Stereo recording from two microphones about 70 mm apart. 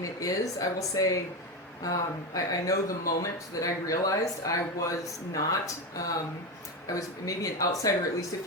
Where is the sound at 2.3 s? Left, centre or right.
Left.